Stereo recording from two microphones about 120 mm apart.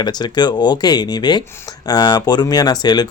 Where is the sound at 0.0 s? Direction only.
35° left (ahead or behind).